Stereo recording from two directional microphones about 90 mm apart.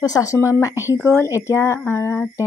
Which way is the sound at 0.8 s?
30° left (ahead or behind).